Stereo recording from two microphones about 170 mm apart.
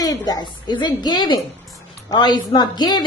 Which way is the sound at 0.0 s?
20° left (ahead or behind).